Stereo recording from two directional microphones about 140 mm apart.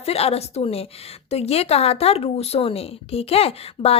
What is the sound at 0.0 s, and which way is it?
A woman's voice, 45° left (ahead or behind).